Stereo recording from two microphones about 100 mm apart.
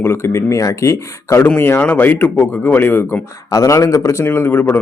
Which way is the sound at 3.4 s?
35° left (ahead or behind).